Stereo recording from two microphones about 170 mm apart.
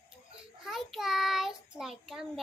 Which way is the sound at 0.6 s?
Centre (ahead or behind).